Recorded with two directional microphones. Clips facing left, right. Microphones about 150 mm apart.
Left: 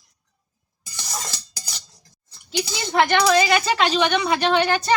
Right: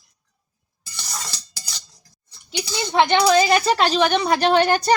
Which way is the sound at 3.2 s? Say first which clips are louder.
Right 2 dB; 35° right (ahead or behind).